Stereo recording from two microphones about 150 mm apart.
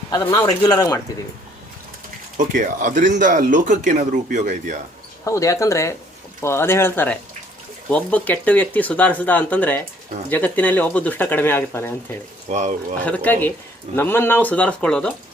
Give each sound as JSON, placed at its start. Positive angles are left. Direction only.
{"t": 0.1, "sound": "speech", "side_deg": 25}
{"t": 2.5, "sound": "speech", "side_deg": -60}
{"t": 5.2, "sound": "speech", "side_deg": 20}
{"t": 12.5, "sound": "speech", "side_deg": -50}
{"t": 13.1, "sound": "speech", "side_deg": 10}